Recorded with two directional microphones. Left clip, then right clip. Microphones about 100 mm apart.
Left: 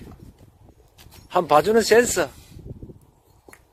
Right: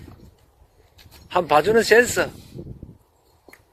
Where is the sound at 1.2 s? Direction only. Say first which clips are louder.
Even; 90° left.